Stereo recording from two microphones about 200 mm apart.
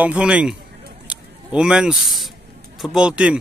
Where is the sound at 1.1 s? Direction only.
5° right (ahead or behind).